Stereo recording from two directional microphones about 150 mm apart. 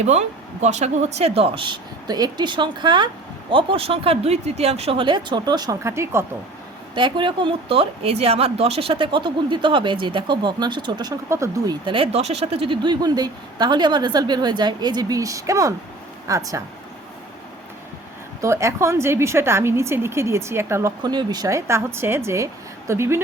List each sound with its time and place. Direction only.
0.0 s speech: 50° right (ahead or behind); by 6.2 s 15° right (ahead or behind)
6.9 s a woman's voice: 30° right (ahead or behind)
18.4 s a woman's voice: 20° right (ahead or behind)
21.0 s a woman's voice: 30° right (ahead or behind)